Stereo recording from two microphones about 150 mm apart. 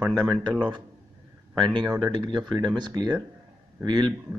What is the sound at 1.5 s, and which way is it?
A man's voice, 30° right (ahead or behind).